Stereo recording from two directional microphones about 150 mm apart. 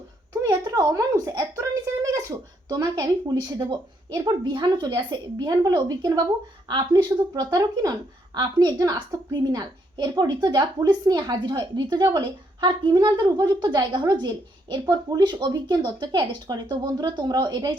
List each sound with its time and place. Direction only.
0.4 s a woman's voice: 25° right (ahead or behind)